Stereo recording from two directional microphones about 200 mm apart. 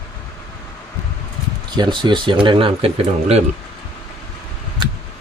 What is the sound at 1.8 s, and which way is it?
Speech, 25° right (ahead or behind).